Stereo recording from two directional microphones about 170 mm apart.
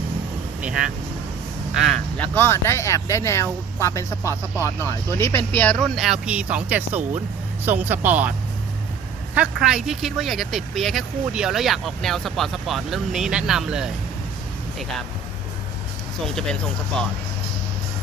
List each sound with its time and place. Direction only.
1.7 s speech: centre (ahead or behind)
6.0 s speech: 5° right (ahead or behind)
9.3 s speech: 5° right (ahead or behind)
16.2 s speech: centre (ahead or behind)